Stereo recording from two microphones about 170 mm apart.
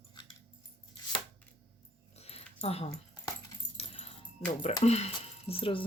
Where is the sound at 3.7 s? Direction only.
35° left (ahead or behind).